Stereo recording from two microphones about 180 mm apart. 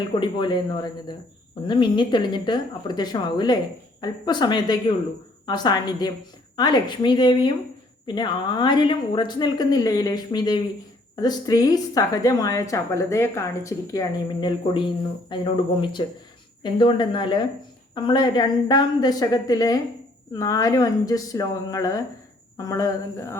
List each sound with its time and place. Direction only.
0.1 s a woman's voice: 25° left (ahead or behind)